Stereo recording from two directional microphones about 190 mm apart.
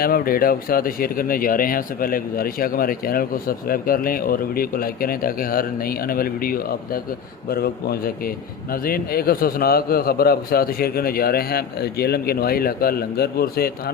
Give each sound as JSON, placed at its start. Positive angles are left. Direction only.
{"t": 0.0, "sound": "speech", "side_deg": 50}